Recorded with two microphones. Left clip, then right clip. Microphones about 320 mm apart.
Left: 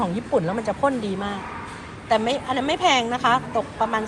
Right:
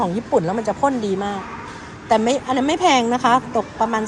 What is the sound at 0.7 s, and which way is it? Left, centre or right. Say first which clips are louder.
A woman's voice: right 3 dB; centre.